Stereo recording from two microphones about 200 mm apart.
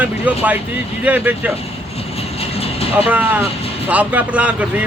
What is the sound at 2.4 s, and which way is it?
Vehicle, 30° left (ahead or behind).